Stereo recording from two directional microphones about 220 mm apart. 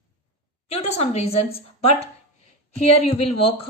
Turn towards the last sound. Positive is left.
turn(degrees=25)  # may be behind; listen again after turning